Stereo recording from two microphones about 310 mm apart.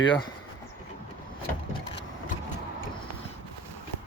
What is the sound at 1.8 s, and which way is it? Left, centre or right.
Vehicle, left.